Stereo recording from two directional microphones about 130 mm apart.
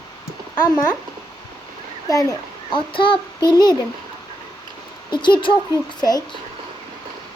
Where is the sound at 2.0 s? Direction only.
30° left (ahead or behind).